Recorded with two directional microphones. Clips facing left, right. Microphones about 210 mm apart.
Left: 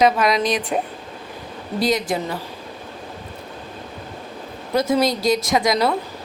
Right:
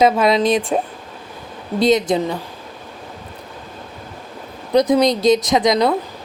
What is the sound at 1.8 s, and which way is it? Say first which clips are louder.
Speech: right 6 dB; 20° right (ahead or behind).